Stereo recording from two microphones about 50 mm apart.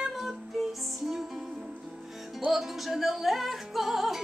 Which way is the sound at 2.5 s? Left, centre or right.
Centre.